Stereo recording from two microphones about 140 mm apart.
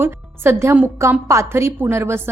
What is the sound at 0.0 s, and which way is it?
A woman's voice, 15° right (ahead or behind).